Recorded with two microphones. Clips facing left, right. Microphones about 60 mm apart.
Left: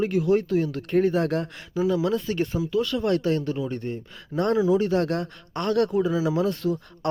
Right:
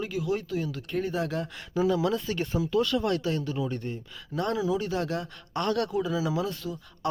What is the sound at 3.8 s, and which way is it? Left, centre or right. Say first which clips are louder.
Speech: left 4 dB; centre.